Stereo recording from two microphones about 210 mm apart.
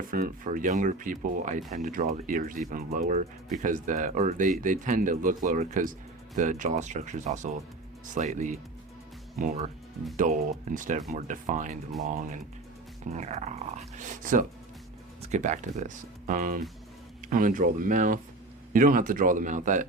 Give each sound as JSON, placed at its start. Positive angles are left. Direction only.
{"t": 0.1, "sound": "speech", "side_deg": -40}
{"t": 10.2, "sound": "speech", "side_deg": -40}